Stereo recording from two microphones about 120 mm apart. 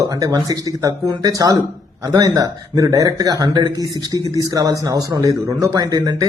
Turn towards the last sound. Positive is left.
turn(degrees=-30)  # may be behind; listen again after turning